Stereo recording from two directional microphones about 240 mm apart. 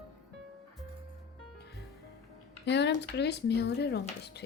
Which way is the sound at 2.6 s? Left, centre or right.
Left.